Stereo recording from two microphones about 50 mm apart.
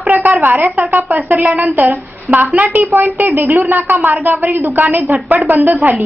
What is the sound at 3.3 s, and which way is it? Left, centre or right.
A woman's voice, right.